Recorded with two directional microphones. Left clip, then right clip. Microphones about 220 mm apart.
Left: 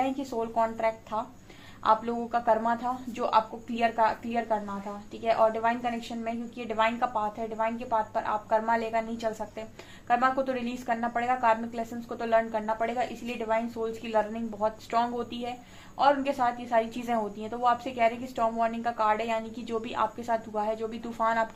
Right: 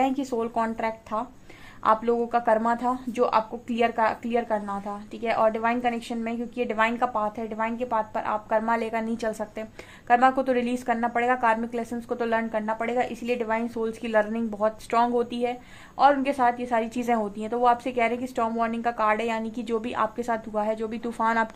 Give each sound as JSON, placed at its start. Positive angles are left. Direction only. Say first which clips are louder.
{"t": 0.0, "sound": "a woman's voice", "louder": "right 4 dB", "side_deg": -40}